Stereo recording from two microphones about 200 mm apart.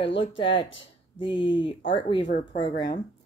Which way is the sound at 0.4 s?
25° left (ahead or behind).